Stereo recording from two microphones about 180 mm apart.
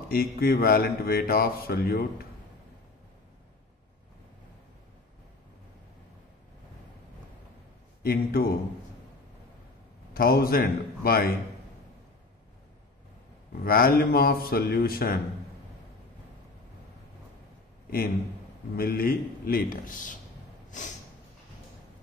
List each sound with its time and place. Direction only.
0.1 s speech: 55° left (ahead or behind)
8.0 s speech: 55° left (ahead or behind)
10.1 s speech: 55° left (ahead or behind)
13.7 s speech: 55° left (ahead or behind)
17.8 s a man's voice: 55° left (ahead or behind)
20.7 s snort: 45° left (ahead or behind)